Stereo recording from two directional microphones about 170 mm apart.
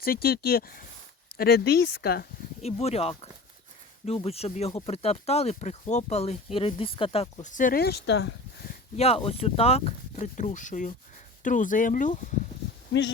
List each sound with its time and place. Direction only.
0.0 s speech: 60° left (ahead or behind)
2.6 s speech: 40° left (ahead or behind); by 8.7 s 80° left
9.0 s speech: 35° left (ahead or behind)